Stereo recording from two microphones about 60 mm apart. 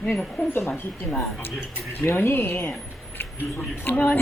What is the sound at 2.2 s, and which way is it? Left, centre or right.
Speech, left.